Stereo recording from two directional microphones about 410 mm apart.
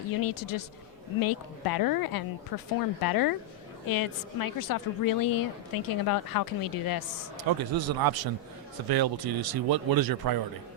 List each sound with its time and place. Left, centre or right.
0.2 s a woman's voice: left
7.3 s speech: right